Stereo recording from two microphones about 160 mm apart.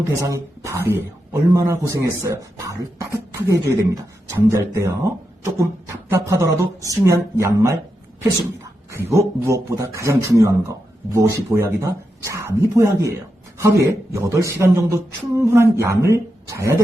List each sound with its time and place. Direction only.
0.2 s a man's voice: 20° right (ahead or behind)
6.1 s a man's voice: 20° right (ahead or behind)
9.0 s a man's voice: 15° right (ahead or behind)